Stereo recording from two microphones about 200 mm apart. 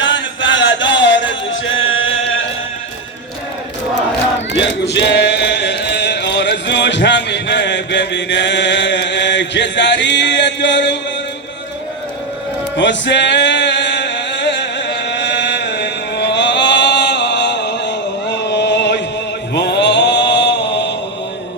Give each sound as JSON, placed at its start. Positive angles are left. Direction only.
{"t": 0.0, "sound": "chant", "side_deg": 70}
{"t": 4.5, "sound": "chant", "side_deg": 60}
{"t": 12.7, "sound": "music", "side_deg": 60}
{"t": 19.5, "sound": "mantra", "side_deg": 60}